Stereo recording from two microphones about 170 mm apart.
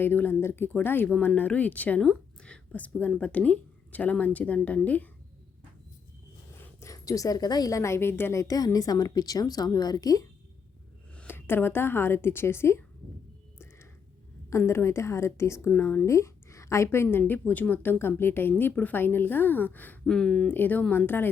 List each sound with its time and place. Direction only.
0.0 s speech: 10° left (ahead or behind)
6.7 s a woman's voice: 20° left (ahead or behind)
11.1 s a woman's voice: 10° left (ahead or behind)
14.5 s speech: 15° left (ahead or behind)